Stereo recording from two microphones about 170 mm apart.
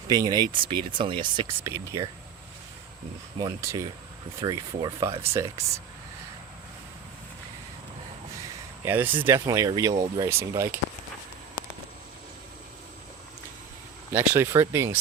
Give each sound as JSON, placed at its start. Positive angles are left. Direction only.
{"t": 0.1, "sound": "speech", "side_deg": -25}
{"t": 1.6, "sound": "speech", "side_deg": -15}
{"t": 3.3, "sound": "speech", "side_deg": -20}
{"t": 8.8, "sound": "speech", "side_deg": -10}
{"t": 14.1, "sound": "speech", "side_deg": -15}